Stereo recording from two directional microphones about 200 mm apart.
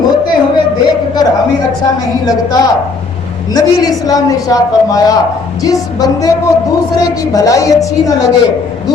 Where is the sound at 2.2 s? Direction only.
20° left (ahead or behind).